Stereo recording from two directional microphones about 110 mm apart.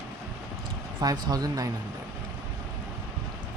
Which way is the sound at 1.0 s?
40° right (ahead or behind).